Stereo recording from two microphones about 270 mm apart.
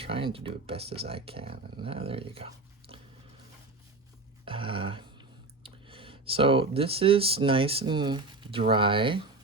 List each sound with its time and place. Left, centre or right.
0.0 s speech: centre
4.4 s a sound: centre
5.6 s speech: centre